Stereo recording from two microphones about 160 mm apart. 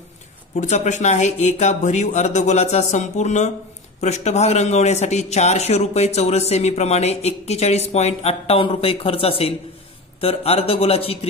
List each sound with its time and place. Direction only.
0.6 s a man's voice: 45° left (ahead or behind)